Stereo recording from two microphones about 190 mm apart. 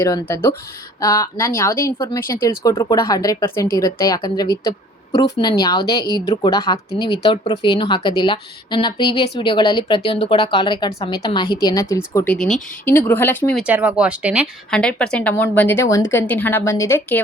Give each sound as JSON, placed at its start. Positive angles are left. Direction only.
{"t": 0.0, "sound": "a woman's voice", "side_deg": 15}
{"t": 13.7, "sound": "speech", "side_deg": -10}
{"t": 14.7, "sound": "a woman's voice", "side_deg": 5}